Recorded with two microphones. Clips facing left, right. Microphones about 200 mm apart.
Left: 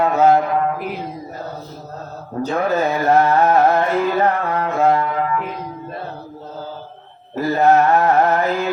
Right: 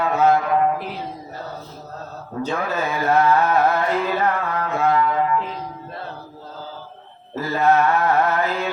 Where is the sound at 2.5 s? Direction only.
35° left (ahead or behind).